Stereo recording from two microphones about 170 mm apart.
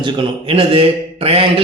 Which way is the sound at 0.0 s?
30° right (ahead or behind).